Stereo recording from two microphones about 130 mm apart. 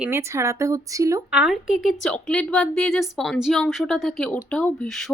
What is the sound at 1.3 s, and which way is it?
Speech, 5° right (ahead or behind).